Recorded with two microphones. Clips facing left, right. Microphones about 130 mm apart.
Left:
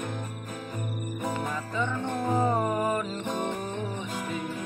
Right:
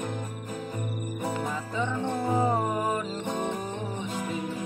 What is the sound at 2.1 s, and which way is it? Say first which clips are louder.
Music: right 1 dB; 10° right (ahead or behind).